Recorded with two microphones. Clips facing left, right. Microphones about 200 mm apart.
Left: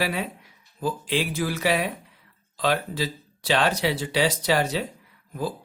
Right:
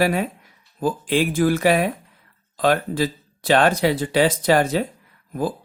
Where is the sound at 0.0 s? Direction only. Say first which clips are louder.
Right 7 dB; 50° right (ahead or behind).